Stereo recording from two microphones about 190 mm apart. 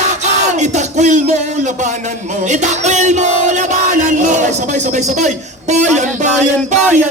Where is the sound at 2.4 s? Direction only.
40° right (ahead or behind).